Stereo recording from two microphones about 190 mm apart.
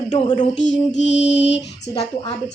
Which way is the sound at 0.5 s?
70° left (ahead or behind).